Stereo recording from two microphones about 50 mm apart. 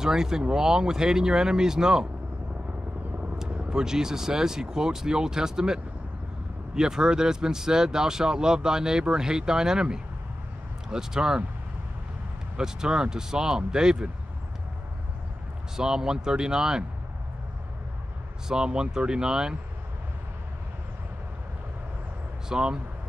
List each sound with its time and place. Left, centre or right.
0.0 s speech: centre
3.7 s speech: centre
12.5 s speech: centre
15.7 s speech: centre
18.5 s speech: centre
22.5 s speech: centre